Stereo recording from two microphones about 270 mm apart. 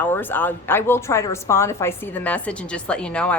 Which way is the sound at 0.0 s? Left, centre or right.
Centre.